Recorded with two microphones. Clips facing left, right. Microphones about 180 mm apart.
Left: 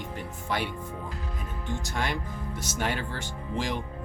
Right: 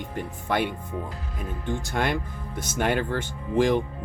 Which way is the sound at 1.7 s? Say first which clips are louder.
Right 5 dB; 55° right (ahead or behind).